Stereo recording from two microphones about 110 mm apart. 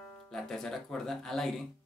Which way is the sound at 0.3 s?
5° left (ahead or behind).